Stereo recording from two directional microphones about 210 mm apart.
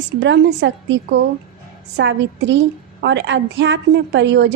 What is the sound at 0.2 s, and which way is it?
A woman's voice, 60° right (ahead or behind).